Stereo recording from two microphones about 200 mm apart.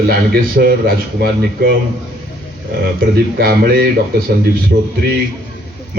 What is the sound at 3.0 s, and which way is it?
Speech, 45° right (ahead or behind).